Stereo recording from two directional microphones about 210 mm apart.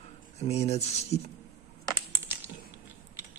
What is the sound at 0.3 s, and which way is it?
Speech, 30° left (ahead or behind).